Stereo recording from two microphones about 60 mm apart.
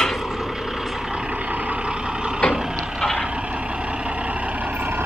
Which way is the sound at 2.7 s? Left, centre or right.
Centre.